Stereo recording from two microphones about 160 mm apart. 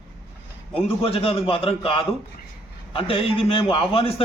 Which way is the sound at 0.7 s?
35° left (ahead or behind).